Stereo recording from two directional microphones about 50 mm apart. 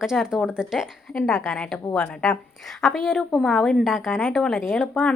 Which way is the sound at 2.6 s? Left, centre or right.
Centre.